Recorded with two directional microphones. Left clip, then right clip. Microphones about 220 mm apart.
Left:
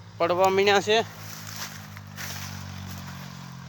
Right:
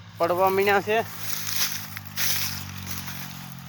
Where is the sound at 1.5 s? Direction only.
40° right (ahead or behind).